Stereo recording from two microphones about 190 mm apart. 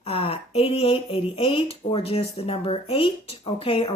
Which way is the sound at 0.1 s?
30° left (ahead or behind).